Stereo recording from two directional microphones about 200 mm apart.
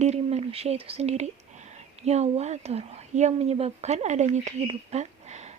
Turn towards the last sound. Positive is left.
turn(degrees=-35)  # may be behind; listen again after turning